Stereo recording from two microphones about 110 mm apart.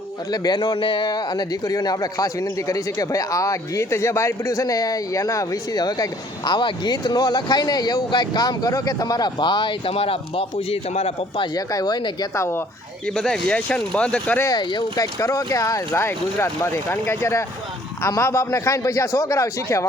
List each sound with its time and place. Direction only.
0.3 s a man's voice: 40° left (ahead or behind); by 11.4 s 65° left (ahead or behind)
11.5 s a man's voice: 35° left (ahead or behind)
13.1 s speech: 5° left (ahead or behind)
14.5 s speech: 45° left (ahead or behind)
15.0 s speech: 30° left (ahead or behind)